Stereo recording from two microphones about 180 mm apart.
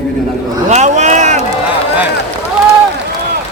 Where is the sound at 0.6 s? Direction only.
40° right (ahead or behind).